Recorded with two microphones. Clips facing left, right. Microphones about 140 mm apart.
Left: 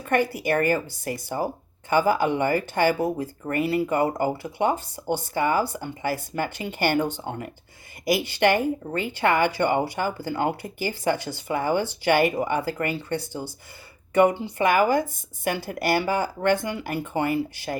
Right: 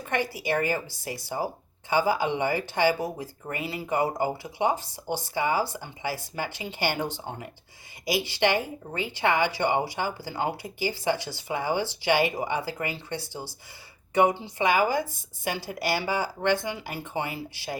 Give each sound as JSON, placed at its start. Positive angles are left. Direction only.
{"t": 0.1, "sound": "speech", "side_deg": 55}